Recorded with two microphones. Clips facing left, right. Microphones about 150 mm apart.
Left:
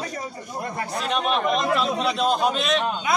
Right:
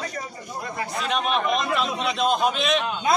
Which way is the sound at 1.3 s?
35° left (ahead or behind).